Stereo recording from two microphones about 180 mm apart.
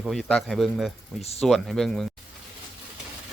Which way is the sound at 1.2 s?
35° left (ahead or behind).